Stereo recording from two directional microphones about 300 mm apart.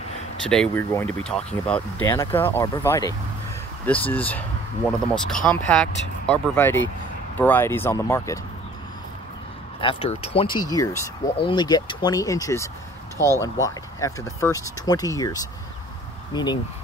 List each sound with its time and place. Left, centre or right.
0.5 s speech: centre
9.8 s speech: centre